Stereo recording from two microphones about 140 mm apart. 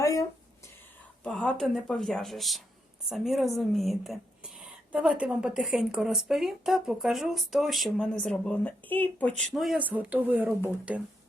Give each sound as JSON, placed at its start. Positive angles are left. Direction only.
{"t": 0.0, "sound": "a sound", "side_deg": 25}
{"t": 1.2, "sound": "speech", "side_deg": 5}
{"t": 9.5, "sound": "speech", "side_deg": -5}